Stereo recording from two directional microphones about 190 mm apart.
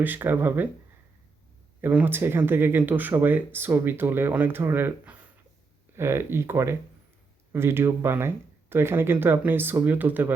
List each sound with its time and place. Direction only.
0.0 s speech: 10° right (ahead or behind)
1.8 s speech: 10° right (ahead or behind)